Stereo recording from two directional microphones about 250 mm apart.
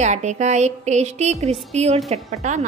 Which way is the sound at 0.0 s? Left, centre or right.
Right.